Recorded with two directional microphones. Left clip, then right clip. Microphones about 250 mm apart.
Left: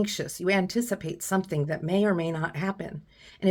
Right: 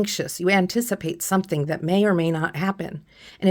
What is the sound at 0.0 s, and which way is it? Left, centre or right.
Speech, right.